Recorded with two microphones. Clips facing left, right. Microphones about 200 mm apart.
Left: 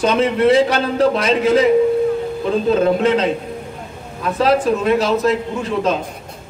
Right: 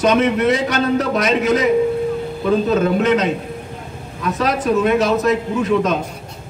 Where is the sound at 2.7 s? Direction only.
30° left (ahead or behind).